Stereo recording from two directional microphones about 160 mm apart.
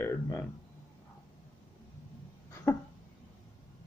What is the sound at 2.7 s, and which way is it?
Speech, 15° left (ahead or behind).